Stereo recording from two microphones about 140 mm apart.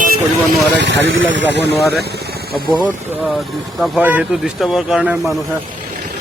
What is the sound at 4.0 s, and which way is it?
Speech, 10° right (ahead or behind).